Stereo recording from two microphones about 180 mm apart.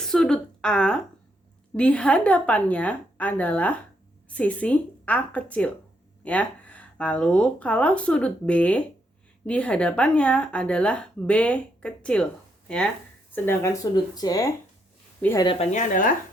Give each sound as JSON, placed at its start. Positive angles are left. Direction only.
{"t": 0.0, "sound": "a sound", "side_deg": 5}
{"t": 1.7, "sound": "speech", "side_deg": 5}
{"t": 15.4, "sound": "a woman's voice", "side_deg": 35}